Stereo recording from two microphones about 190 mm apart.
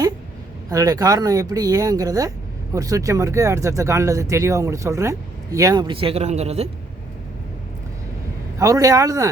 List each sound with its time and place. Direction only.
0.7 s speech: 20° right (ahead or behind); by 6.7 s 35° right (ahead or behind)
8.5 s speech: 15° right (ahead or behind)